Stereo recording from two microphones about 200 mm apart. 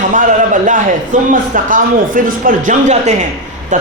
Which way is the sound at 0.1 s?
40° right (ahead or behind).